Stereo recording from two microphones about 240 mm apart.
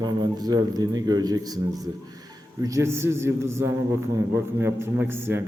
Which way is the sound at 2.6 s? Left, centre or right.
Centre.